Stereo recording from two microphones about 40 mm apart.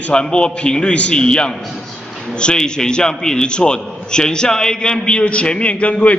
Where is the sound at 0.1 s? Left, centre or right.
Left.